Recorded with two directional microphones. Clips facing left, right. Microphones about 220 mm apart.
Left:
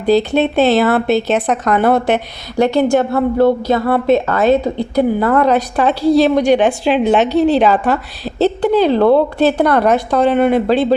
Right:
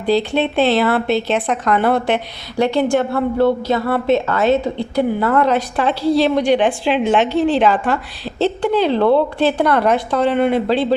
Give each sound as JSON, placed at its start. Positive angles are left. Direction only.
{"t": 0.0, "sound": "speech", "side_deg": 45}